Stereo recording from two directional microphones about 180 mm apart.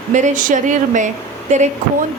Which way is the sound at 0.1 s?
45° right (ahead or behind).